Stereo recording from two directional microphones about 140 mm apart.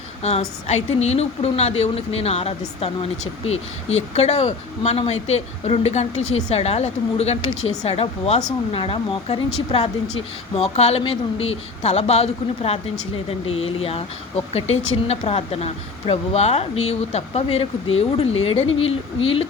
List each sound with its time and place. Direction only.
0.2 s speech: 50° left (ahead or behind)